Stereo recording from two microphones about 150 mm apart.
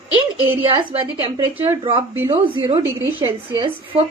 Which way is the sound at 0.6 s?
35° right (ahead or behind).